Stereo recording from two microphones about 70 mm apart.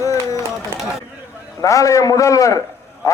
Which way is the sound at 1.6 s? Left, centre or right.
Left.